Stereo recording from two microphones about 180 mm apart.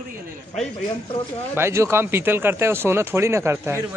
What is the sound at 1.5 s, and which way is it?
Speech, 15° right (ahead or behind).